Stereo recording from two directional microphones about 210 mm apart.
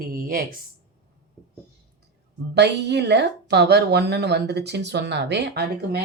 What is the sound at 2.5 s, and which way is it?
A woman's voice, 55° right (ahead or behind).